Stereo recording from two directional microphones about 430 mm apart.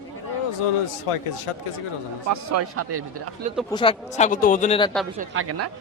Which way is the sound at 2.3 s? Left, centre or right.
Right.